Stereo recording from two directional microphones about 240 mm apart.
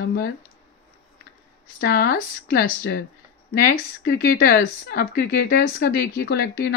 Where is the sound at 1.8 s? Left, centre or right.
Left.